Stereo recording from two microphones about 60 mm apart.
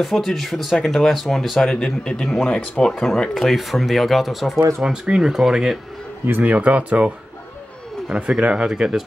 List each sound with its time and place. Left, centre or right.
0.0 s speech: centre
4.6 s speech: right
4.8 s speech: centre
6.4 s speech: right
8.1 s speech: centre